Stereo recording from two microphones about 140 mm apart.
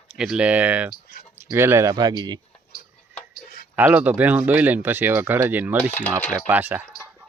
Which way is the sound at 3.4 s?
90° left.